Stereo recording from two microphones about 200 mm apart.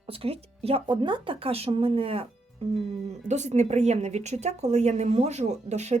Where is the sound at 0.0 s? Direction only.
30° right (ahead or behind).